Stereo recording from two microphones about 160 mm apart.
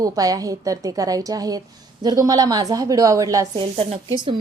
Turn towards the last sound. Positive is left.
turn(degrees=-35)  # may be behind; listen again after turning